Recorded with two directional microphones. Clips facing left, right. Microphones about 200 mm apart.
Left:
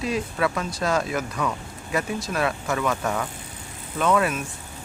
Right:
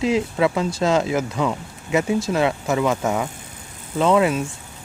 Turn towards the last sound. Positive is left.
turn(degrees=-25)  # may be behind; listen again after turning